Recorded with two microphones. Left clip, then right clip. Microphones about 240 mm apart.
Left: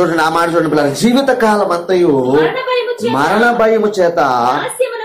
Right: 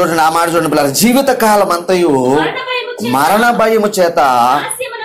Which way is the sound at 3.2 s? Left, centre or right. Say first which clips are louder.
Right 2 dB; right.